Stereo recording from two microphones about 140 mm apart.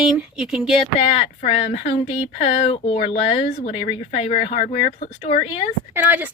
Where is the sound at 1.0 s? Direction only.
55° left (ahead or behind).